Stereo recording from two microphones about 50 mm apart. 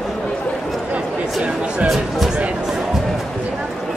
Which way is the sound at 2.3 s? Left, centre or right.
Centre.